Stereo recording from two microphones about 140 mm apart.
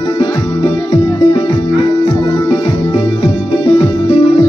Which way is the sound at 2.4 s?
35° left (ahead or behind).